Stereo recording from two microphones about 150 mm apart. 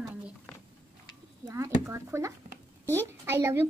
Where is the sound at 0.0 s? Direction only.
5° right (ahead or behind).